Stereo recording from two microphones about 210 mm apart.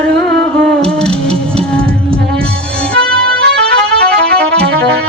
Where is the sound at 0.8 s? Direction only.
5° left (ahead or behind).